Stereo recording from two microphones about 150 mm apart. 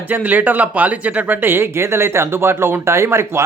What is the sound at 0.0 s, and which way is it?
Speech, 10° right (ahead or behind).